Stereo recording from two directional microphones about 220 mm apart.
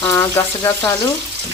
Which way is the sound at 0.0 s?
15° left (ahead or behind).